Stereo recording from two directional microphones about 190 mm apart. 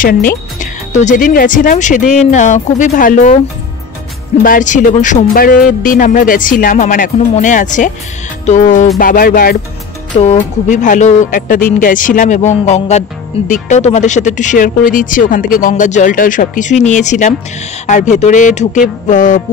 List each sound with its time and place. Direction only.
0.0 s speech: 45° left (ahead or behind)
4.4 s speech: 45° left (ahead or behind)
10.1 s speech: 30° left (ahead or behind)
10.7 s speech: 40° left (ahead or behind)